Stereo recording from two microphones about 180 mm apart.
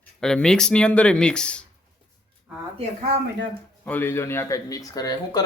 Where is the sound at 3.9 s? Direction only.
10° left (ahead or behind).